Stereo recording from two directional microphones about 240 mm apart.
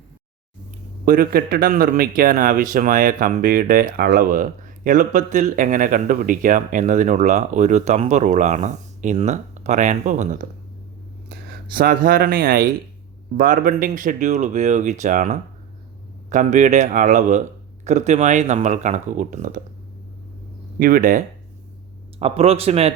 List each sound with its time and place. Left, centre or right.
1.0 s speech: right
20.7 s speech: right